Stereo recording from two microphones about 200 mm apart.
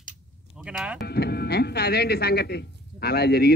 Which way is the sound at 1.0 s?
50° left (ahead or behind).